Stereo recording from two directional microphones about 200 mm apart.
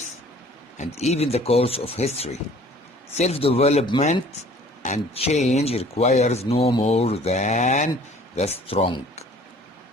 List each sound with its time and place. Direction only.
0.8 s speech: 35° left (ahead or behind)